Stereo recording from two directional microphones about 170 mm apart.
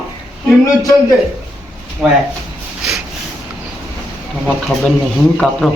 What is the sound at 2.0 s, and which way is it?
Speech, centre (ahead or behind).